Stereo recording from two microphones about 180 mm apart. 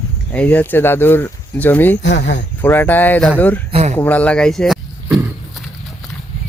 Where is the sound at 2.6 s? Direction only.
10° left (ahead or behind).